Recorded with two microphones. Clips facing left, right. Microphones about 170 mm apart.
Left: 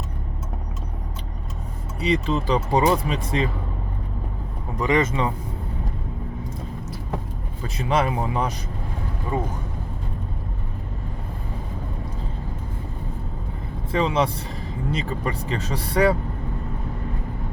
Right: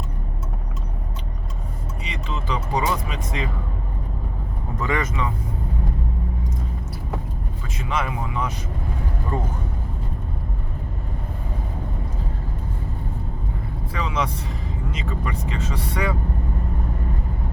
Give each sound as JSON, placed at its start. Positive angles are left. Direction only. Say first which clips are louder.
{"t": 2.0, "sound": "speech", "louder": "left 11 dB", "side_deg": 35}
{"t": 4.8, "sound": "speech", "louder": "left 4 dB", "side_deg": 20}
{"t": 7.6, "sound": "speech", "louder": "left 5 dB", "side_deg": 35}
{"t": 9.3, "sound": "speech", "louder": "left 2 dB", "side_deg": 10}
{"t": 13.9, "sound": "speech", "louder": "left 5 dB", "side_deg": 30}